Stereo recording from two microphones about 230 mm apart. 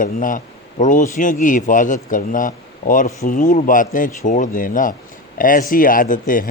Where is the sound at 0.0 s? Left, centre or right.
Left.